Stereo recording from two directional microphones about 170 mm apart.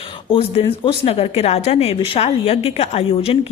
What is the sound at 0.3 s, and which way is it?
Speech, 35° left (ahead or behind).